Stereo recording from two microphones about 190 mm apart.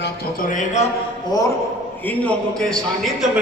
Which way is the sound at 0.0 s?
45° left (ahead or behind).